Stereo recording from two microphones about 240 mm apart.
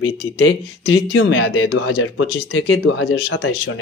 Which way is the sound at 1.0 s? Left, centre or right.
Left.